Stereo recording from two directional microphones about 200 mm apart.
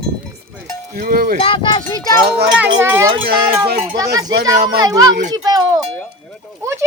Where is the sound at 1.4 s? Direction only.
25° left (ahead or behind).